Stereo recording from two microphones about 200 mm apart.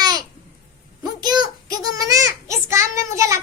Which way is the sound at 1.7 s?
45° left (ahead or behind).